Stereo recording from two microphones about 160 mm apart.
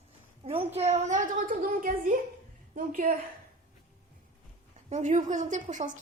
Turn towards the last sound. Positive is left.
turn(degrees=-50)  # may be behind; listen again after turning